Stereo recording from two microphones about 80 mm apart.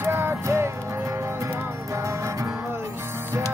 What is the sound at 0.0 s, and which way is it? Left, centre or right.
Music, right.